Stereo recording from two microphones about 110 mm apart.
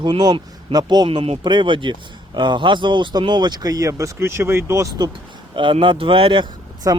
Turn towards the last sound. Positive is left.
turn(degrees=-30)  # may be behind; listen again after turning